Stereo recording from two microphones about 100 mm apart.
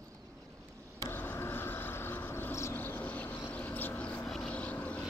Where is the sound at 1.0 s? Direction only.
20° left (ahead or behind).